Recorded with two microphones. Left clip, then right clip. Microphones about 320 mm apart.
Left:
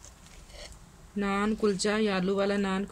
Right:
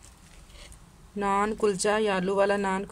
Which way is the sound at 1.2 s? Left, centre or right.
Centre.